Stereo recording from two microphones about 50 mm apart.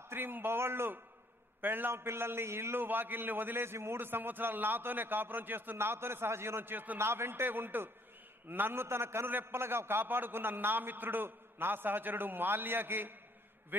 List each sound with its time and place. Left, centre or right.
0.1 s a man's voice: right
2.8 s a man's voice: right
7.0 s a man's voice: right
8.8 s a man's voice: right